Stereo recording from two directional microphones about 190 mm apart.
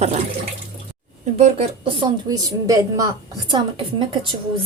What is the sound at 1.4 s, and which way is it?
Speech, 35° right (ahead or behind).